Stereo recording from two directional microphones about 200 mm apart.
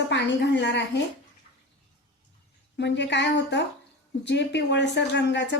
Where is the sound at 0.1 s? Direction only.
60° left (ahead or behind).